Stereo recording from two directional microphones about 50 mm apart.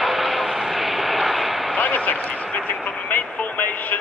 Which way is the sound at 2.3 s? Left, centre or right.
Left.